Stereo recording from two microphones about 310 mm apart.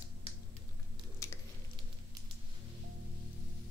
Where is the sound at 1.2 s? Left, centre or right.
Centre.